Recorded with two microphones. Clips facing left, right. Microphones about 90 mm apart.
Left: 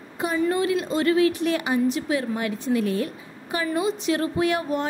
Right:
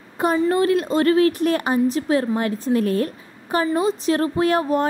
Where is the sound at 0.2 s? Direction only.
50° right (ahead or behind).